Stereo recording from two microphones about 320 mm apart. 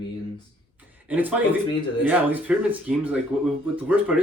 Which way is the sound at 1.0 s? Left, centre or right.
Centre.